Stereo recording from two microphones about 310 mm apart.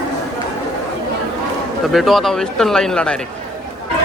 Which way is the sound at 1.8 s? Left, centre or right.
Centre.